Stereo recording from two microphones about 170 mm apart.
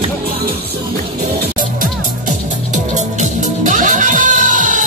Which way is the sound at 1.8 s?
45° right (ahead or behind).